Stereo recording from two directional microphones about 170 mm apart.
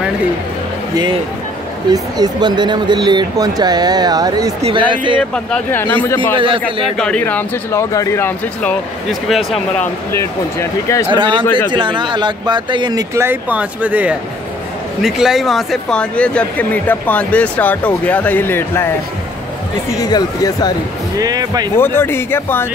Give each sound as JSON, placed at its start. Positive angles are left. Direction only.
{"t": 1.9, "sound": "speech", "side_deg": -25}
{"t": 4.6, "sound": "speech", "side_deg": -30}
{"t": 5.3, "sound": "speech", "side_deg": 10}
{"t": 6.3, "sound": "a man's voice", "side_deg": -30}
{"t": 6.6, "sound": "speech", "side_deg": 5}
{"t": 9.3, "sound": "speech", "side_deg": 0}
{"t": 10.1, "sound": "speech", "side_deg": 15}
{"t": 11.1, "sound": "speech", "side_deg": -30}
{"t": 19.9, "sound": "speech", "side_deg": 20}
{"t": 21.2, "sound": "speech", "side_deg": -25}
{"t": 21.7, "sound": "speech", "side_deg": 15}